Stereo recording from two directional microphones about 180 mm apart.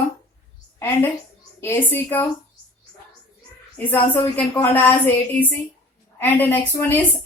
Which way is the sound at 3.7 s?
10° left (ahead or behind).